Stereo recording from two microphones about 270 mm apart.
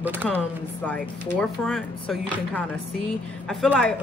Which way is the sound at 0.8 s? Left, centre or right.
Centre.